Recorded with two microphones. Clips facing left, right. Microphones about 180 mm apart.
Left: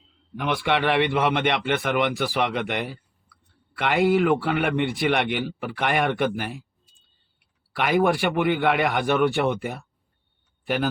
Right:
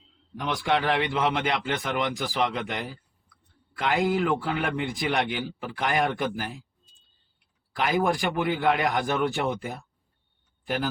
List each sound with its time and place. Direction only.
0.3 s a man's voice: 65° left (ahead or behind)
7.8 s a man's voice: 65° left (ahead or behind)